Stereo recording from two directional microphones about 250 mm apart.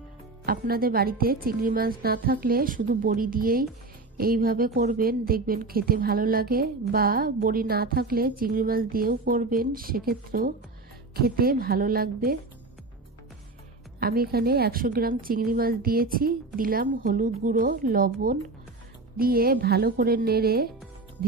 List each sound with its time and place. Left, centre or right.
0.5 s a woman's voice: right
13.9 s a woman's voice: right